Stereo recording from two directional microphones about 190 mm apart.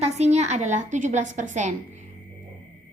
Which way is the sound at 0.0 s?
35° right (ahead or behind).